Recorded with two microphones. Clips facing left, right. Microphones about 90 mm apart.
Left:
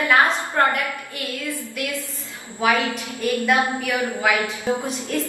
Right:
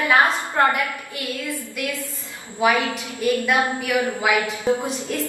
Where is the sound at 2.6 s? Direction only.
20° right (ahead or behind).